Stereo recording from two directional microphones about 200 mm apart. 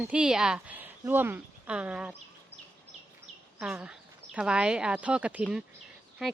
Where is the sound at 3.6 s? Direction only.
5° right (ahead or behind).